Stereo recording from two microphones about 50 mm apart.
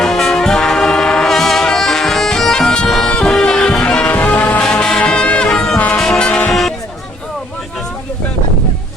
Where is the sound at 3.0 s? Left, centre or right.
Centre.